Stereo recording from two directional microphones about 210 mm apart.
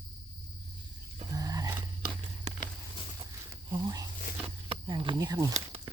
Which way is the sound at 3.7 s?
20° right (ahead or behind).